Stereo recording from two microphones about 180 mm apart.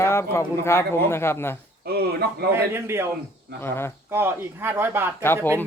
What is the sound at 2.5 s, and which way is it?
Speech, 15° right (ahead or behind).